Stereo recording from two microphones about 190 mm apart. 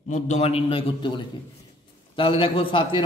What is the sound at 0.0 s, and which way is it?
A man's voice, 40° left (ahead or behind).